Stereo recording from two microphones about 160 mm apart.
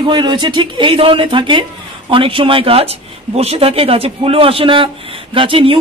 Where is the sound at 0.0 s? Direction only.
30° right (ahead or behind).